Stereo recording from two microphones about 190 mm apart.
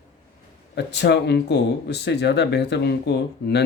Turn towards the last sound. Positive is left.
turn(degrees=60)  # may be behind; listen again after turning